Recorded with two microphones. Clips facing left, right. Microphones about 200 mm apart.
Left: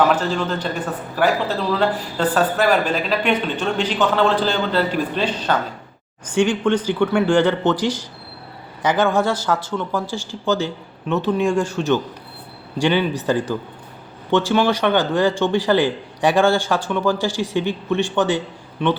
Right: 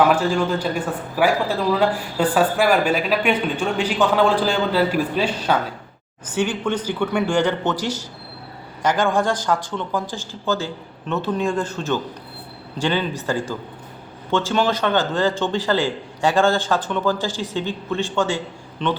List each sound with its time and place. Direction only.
0.1 s a man's voice: 10° right (ahead or behind)
10.2 s a man's voice: 15° left (ahead or behind)